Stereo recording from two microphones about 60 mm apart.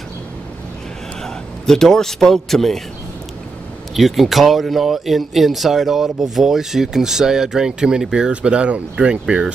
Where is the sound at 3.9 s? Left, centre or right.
Centre.